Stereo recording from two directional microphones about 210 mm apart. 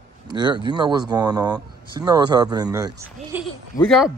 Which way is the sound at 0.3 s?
20° right (ahead or behind).